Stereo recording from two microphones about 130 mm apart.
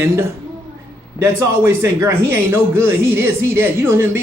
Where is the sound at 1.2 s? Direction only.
20° right (ahead or behind).